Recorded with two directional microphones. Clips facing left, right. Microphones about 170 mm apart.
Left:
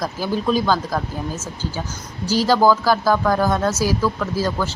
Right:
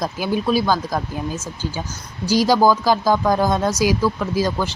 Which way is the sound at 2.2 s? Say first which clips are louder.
Right 1 dB; 15° right (ahead or behind).